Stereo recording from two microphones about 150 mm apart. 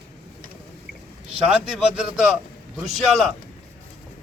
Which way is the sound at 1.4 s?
5° right (ahead or behind).